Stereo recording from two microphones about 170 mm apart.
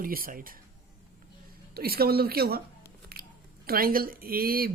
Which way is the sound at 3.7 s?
60° right (ahead or behind).